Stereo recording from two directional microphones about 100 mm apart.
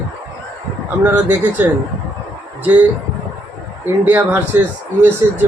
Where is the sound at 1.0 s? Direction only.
15° right (ahead or behind).